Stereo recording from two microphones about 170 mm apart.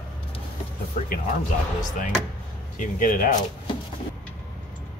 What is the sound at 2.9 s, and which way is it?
Speech, 55° left (ahead or behind).